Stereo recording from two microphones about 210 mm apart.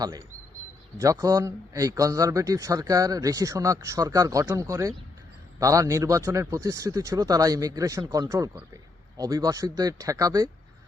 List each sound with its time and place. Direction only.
0.0 s speech: 15° right (ahead or behind)